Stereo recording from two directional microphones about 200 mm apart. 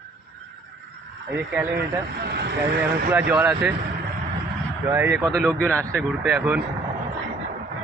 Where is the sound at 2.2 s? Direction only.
55° right (ahead or behind).